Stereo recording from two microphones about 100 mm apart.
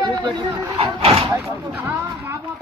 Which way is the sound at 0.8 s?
75° right (ahead or behind).